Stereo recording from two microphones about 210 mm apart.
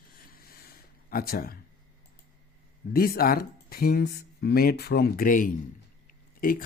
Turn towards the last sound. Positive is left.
turn(degrees=45)  # may be behind; listen again after turning